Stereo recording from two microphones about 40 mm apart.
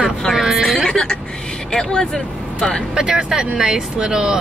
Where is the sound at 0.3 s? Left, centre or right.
Centre.